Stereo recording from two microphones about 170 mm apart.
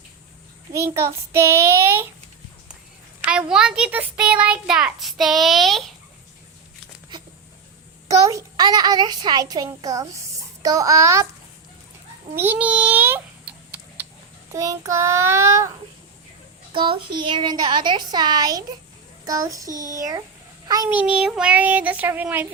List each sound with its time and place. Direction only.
0.9 s speech: 15° right (ahead or behind)
3.2 s a child's voice: 5° right (ahead or behind)
8.3 s a child's voice: 20° right (ahead or behind)
12.4 s a sound: 10° right (ahead or behind)
14.5 s speech: 20° right (ahead or behind)
16.7 s a child's voice: 30° right (ahead or behind)
19.6 s a child's voice: 50° right (ahead or behind)
20.0 s a child's voice: 20° right (ahead or behind)
20.9 s speech: 5° right (ahead or behind)